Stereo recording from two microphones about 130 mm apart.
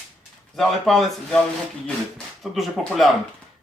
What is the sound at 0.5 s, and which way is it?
Speech, centre (ahead or behind).